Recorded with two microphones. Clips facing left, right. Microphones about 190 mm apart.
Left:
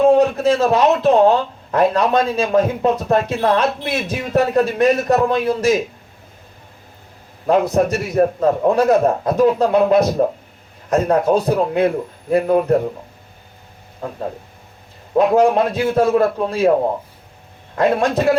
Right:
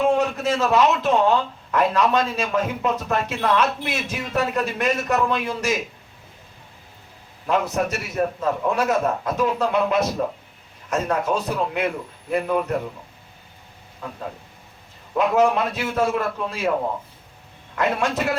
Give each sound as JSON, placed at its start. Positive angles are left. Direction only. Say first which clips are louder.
{"t": 0.0, "sound": "a sound", "louder": "left 7 dB", "side_deg": 35}
{"t": 0.6, "sound": "a man's voice", "louder": "left 2 dB", "side_deg": 35}
{"t": 7.4, "sound": "a man's voice", "louder": "left 7 dB", "side_deg": 35}
{"t": 15.1, "sound": "a man's voice", "louder": "left 5 dB", "side_deg": 35}
{"t": 17.7, "sound": "a man's voice", "louder": "left 6 dB", "side_deg": 35}